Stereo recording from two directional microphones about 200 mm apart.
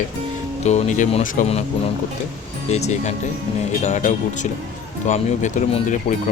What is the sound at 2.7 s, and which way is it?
Speech, 35° left (ahead or behind).